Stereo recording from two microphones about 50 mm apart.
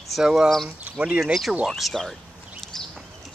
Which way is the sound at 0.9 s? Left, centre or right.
Right.